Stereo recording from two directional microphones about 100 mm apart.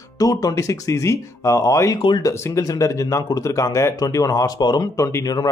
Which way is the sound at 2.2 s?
35° left (ahead or behind).